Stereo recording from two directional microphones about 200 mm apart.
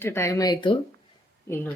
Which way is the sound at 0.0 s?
15° left (ahead or behind).